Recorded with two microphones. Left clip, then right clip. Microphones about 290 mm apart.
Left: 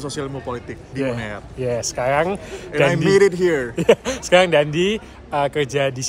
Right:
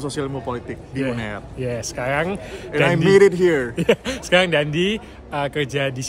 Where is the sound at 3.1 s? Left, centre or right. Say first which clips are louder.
Right 4 dB; centre.